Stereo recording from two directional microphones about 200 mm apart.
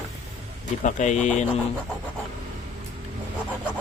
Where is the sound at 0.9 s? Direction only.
40° left (ahead or behind).